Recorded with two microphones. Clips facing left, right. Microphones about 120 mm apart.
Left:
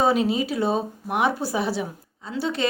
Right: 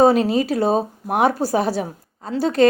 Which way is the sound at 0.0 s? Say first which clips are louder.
Right 6 dB; 40° right (ahead or behind).